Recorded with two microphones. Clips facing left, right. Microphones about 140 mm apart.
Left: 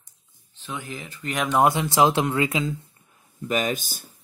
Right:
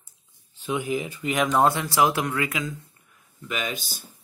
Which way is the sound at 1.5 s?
15° left (ahead or behind).